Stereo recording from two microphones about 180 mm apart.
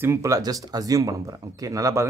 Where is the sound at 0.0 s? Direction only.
15° right (ahead or behind).